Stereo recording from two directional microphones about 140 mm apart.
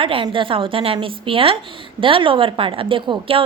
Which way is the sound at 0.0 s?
40° right (ahead or behind).